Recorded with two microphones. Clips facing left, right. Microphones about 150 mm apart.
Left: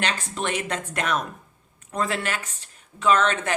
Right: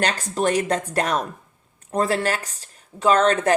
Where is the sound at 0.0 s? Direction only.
40° right (ahead or behind).